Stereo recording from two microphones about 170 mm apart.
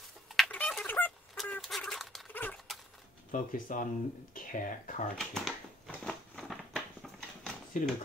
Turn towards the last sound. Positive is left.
turn(degrees=0)  # may be behind; listen again after turning